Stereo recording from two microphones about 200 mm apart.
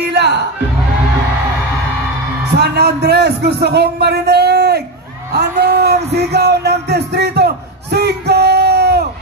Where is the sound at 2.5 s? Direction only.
55° right (ahead or behind).